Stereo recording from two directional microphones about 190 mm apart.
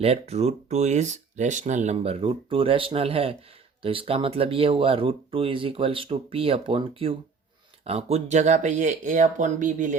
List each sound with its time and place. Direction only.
0.0 s speech: 30° right (ahead or behind)